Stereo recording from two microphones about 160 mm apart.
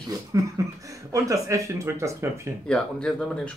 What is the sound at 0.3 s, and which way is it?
Speech, 20° right (ahead or behind).